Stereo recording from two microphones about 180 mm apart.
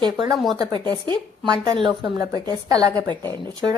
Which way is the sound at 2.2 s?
20° right (ahead or behind).